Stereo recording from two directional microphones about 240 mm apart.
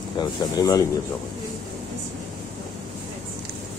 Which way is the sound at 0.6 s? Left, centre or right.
Centre.